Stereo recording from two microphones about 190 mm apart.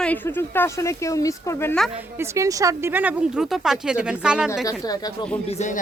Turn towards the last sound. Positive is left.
turn(degrees=20)  # may be behind; listen again after turning